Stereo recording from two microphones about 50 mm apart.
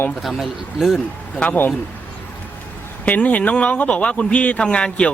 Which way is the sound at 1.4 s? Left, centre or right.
Left.